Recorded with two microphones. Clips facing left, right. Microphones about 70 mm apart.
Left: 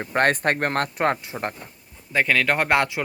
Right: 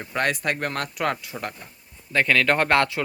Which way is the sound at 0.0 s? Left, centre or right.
Left.